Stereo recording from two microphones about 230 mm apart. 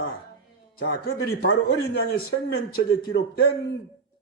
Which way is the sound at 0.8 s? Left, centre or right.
Left.